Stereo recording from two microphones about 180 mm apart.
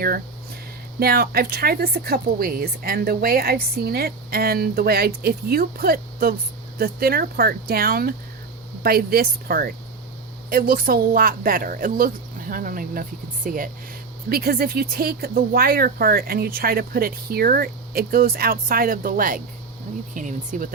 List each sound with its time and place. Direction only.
0.9 s a woman's voice: 60° right (ahead or behind)